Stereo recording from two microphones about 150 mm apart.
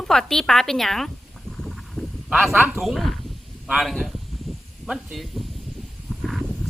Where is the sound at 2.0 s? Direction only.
Centre (ahead or behind).